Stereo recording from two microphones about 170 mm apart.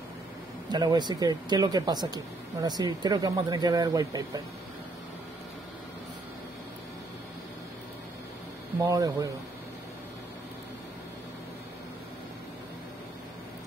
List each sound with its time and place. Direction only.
0.7 s speech: 25° right (ahead or behind)
8.7 s speech: 15° right (ahead or behind)